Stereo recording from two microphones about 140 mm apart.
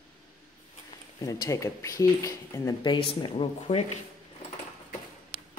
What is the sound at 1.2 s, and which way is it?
Speech, 25° left (ahead or behind).